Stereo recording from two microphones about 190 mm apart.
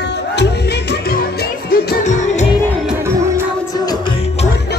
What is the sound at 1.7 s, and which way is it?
Music, 45° left (ahead or behind).